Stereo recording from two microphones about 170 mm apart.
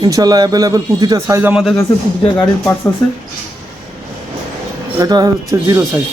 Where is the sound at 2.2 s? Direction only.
30° left (ahead or behind).